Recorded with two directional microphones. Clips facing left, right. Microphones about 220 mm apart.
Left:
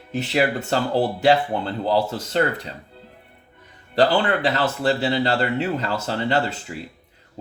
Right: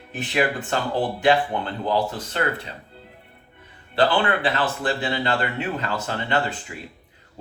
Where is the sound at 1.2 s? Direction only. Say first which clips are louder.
Even; 35° left (ahead or behind).